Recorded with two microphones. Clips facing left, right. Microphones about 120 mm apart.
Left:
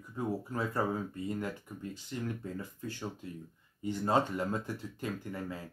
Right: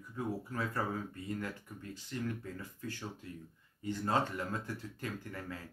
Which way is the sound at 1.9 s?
20° left (ahead or behind).